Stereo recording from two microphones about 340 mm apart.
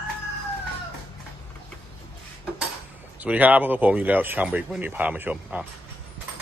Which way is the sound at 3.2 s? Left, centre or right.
Centre.